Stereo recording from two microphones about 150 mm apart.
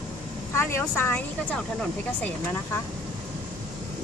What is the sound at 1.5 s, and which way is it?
Speech, 5° left (ahead or behind).